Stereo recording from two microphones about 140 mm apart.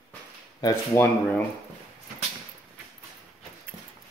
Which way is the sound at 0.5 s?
25° left (ahead or behind).